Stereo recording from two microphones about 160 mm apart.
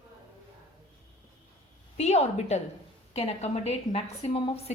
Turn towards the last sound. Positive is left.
turn(degrees=35)  # may be behind; listen again after turning